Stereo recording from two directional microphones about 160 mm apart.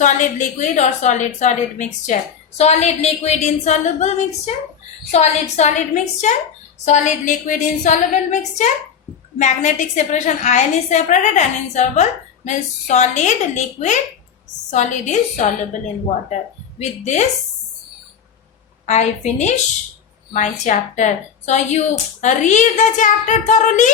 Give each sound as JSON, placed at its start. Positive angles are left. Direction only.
{"t": 0.0, "sound": "a woman's voice", "side_deg": 50}
{"t": 5.1, "sound": "a woman's voice", "side_deg": 45}
{"t": 17.0, "sound": "a woman's voice", "side_deg": 45}
{"t": 18.9, "sound": "a woman's voice", "side_deg": 45}